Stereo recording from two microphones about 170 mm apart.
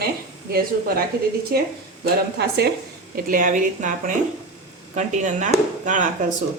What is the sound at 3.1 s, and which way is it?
A woman's voice, 55° right (ahead or behind).